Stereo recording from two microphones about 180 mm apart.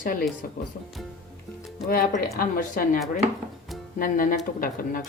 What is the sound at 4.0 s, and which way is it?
Speech, 50° left (ahead or behind).